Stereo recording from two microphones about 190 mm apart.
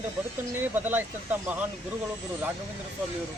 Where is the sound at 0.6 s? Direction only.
10° right (ahead or behind).